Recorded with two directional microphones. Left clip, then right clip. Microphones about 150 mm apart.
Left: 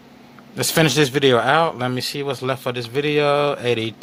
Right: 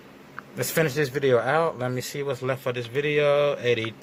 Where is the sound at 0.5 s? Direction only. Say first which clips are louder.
Left 7 dB; 25° left (ahead or behind).